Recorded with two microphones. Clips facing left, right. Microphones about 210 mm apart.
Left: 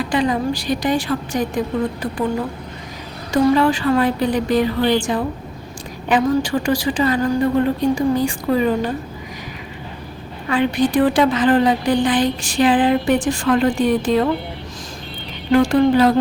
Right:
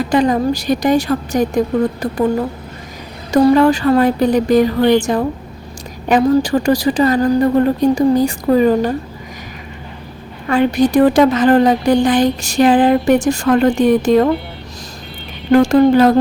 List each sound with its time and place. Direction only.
0.1 s a woman's voice: 45° right (ahead or behind)
3.3 s a woman's voice: 40° right (ahead or behind)
10.5 s a woman's voice: 40° right (ahead or behind)
15.5 s a woman's voice: 45° right (ahead or behind)